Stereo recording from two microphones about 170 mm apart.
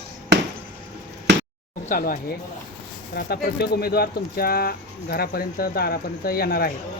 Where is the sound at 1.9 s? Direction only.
55° left (ahead or behind).